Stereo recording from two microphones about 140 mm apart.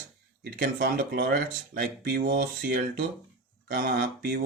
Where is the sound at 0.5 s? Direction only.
90° right.